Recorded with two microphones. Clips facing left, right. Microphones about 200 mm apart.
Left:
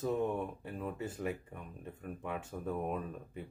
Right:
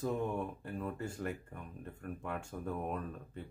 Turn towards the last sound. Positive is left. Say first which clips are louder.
# left 1 dB
turn(degrees=5)  # may be behind; listen again after turning